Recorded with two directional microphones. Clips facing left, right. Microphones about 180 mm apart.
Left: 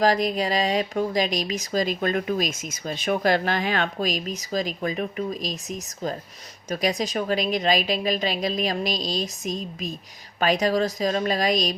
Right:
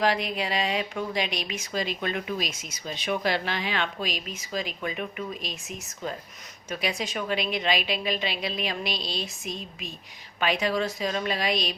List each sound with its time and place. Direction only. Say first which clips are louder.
0.0 s speech: left 5 dB; 40° left (ahead or behind)
6.7 s speech: left 6 dB; 40° left (ahead or behind)